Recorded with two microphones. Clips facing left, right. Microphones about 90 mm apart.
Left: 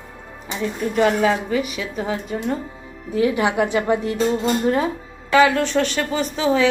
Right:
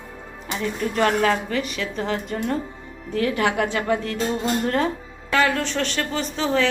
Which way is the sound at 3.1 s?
15° left (ahead or behind).